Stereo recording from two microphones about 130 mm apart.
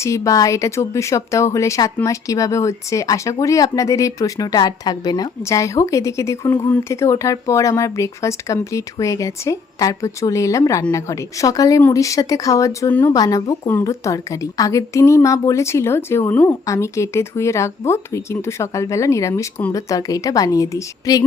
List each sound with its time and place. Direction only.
0.0 s speech: 25° left (ahead or behind)
13.1 s speech: 25° left (ahead or behind)